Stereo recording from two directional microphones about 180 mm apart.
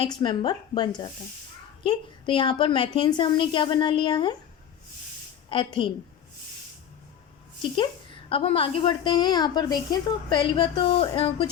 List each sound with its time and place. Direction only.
0.0 s a woman's voice: 25° left (ahead or behind)
5.5 s a woman's voice: 25° left (ahead or behind)
8.3 s a woman's voice: 30° left (ahead or behind)